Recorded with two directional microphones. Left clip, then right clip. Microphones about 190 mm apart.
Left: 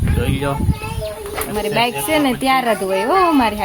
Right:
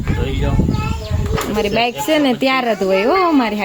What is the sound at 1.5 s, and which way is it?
Speech, 15° right (ahead or behind).